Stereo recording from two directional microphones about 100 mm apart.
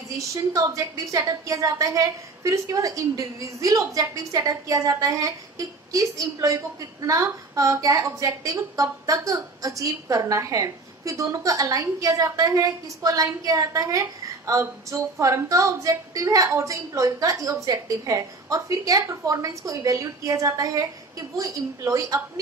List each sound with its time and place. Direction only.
0.3 s a woman's voice: 35° right (ahead or behind)